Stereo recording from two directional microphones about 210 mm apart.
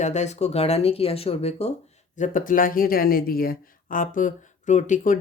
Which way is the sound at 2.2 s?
40° left (ahead or behind).